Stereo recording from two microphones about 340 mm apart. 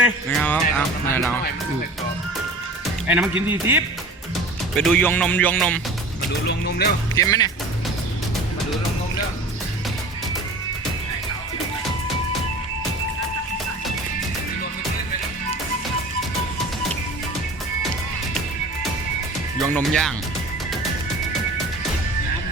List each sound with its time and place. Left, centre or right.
0.0 s speech: centre
3.5 s speech: centre
6.4 s speech: left
7.2 s speech: centre
19.5 s speech: centre